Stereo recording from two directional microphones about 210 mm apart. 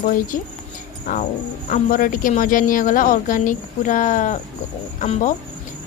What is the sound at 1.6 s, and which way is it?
Speech, 40° left (ahead or behind).